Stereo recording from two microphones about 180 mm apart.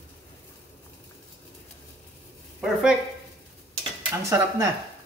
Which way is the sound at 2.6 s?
5° right (ahead or behind).